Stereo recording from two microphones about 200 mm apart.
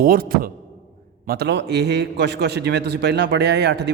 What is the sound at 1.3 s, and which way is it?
A man's voice, 55° right (ahead or behind).